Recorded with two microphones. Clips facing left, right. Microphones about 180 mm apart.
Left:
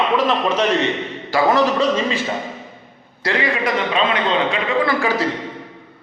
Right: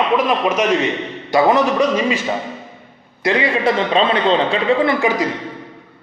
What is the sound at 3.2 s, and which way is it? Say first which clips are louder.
A man's voice: right 4 dB; 25° right (ahead or behind).